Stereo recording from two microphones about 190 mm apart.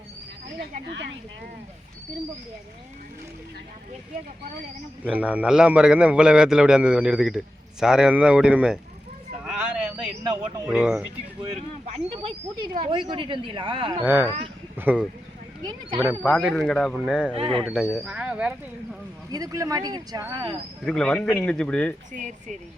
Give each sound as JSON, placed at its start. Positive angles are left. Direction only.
{"t": 5.0, "sound": "a man's voice", "side_deg": -5}
{"t": 9.4, "sound": "vehicle", "side_deg": -5}
{"t": 10.7, "sound": "a man's voice", "side_deg": -5}
{"t": 11.9, "sound": "speech", "side_deg": -30}
{"t": 14.0, "sound": "speech", "side_deg": -10}
{"t": 14.3, "sound": "speech", "side_deg": -30}
{"t": 14.8, "sound": "speech", "side_deg": -10}
{"t": 16.4, "sound": "a man's voice", "side_deg": 0}
{"t": 17.3, "sound": "speech", "side_deg": -30}
{"t": 17.6, "sound": "a man's voice", "side_deg": -5}
{"t": 19.3, "sound": "speech", "side_deg": -20}
{"t": 20.8, "sound": "a man's voice", "side_deg": 5}
{"t": 22.1, "sound": "speech", "side_deg": -40}